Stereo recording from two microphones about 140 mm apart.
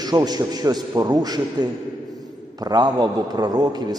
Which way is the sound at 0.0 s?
30° right (ahead or behind).